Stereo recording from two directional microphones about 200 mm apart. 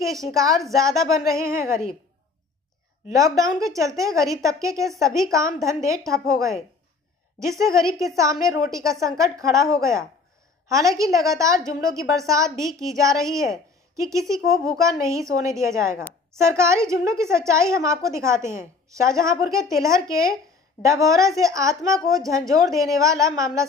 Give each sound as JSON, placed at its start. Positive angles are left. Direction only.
{"t": 0.3, "sound": "a woman's voice", "side_deg": -15}
{"t": 3.1, "sound": "a woman's voice", "side_deg": -15}